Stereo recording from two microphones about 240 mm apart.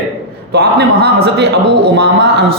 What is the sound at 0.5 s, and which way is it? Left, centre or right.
A man's voice, right.